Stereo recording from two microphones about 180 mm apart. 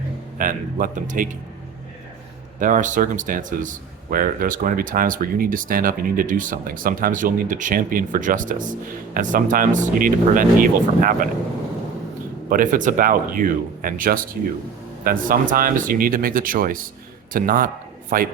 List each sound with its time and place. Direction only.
0.3 s a man's voice: 50° right (ahead or behind)
2.6 s a man's voice: 45° right (ahead or behind)
12.5 s a man's voice: 50° right (ahead or behind)